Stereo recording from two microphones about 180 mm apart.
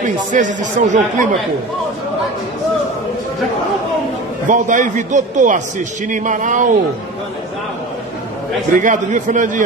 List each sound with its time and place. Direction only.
0.0 s speech: 45° right (ahead or behind)
4.5 s speech: 45° right (ahead or behind)
8.7 s speech: 45° right (ahead or behind)